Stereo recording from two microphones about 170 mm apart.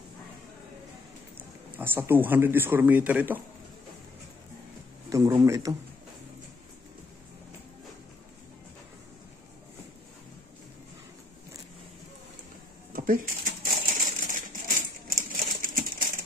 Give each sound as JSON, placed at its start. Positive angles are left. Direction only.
{"t": 1.8, "sound": "speech", "side_deg": -10}
{"t": 5.1, "sound": "speech", "side_deg": -20}
{"t": 12.9, "sound": "a sound", "side_deg": -55}
{"t": 15.0, "sound": "crumpling", "side_deg": -55}